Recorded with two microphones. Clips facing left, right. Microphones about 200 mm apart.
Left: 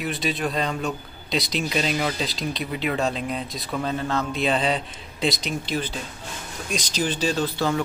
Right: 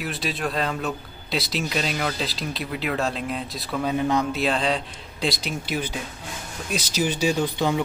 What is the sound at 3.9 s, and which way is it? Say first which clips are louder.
Speech: right 6 dB; 15° right (ahead or behind).